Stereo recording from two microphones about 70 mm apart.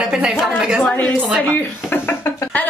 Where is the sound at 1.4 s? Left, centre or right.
Left.